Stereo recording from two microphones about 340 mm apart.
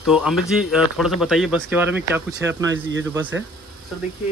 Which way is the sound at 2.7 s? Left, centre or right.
Right.